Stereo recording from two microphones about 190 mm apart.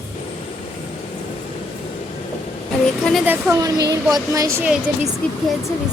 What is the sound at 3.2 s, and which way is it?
Speech, 15° right (ahead or behind).